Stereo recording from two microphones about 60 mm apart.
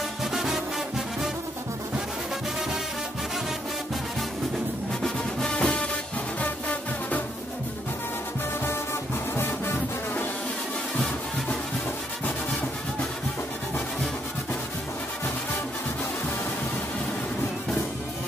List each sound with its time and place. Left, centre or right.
0.2 s music: centre
5.0 s music: centre
9.3 s music: left